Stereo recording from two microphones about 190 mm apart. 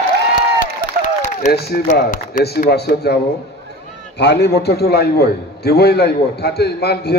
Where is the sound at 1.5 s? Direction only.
55° left (ahead or behind).